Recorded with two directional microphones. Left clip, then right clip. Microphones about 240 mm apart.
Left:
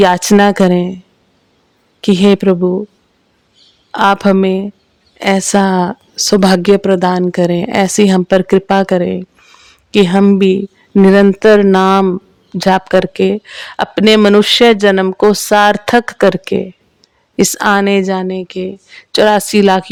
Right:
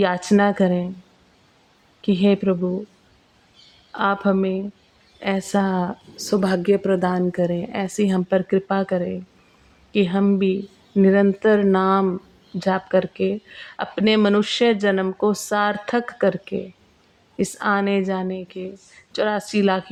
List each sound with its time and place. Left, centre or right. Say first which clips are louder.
0.0 s speech: left 10 dB; left
2.0 s speech: left 9 dB; left
3.9 s speech: left 10 dB; left